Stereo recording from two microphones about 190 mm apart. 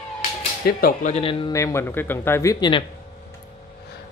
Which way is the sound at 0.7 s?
50° left (ahead or behind).